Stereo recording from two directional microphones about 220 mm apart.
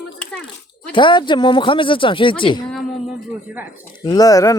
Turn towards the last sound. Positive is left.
turn(degrees=15)  # may be behind; listen again after turning